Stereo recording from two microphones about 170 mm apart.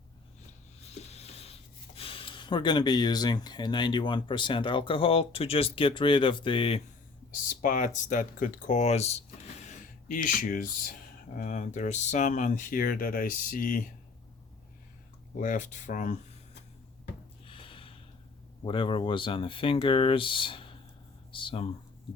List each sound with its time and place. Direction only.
0.9 s a sound: 40° left (ahead or behind)
2.0 s speech: 30° left (ahead or behind)
7.6 s speech: 50° left (ahead or behind)
10.1 s speech: 50° left (ahead or behind)
15.4 s speech: 50° left (ahead or behind)
17.4 s snort: 30° left (ahead or behind)
18.6 s speech: 30° left (ahead or behind)